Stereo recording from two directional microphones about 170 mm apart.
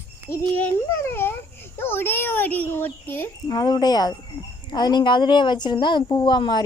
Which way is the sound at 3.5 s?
25° left (ahead or behind).